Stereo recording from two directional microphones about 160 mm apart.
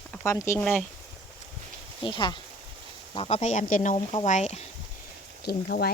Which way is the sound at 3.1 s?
40° left (ahead or behind).